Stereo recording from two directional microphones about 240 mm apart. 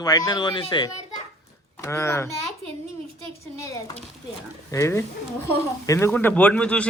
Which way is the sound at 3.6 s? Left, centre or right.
Centre.